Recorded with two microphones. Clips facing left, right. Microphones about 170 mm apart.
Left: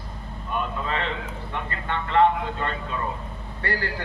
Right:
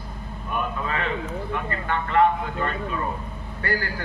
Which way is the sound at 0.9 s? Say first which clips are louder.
Right 1 dB; 25° left (ahead or behind).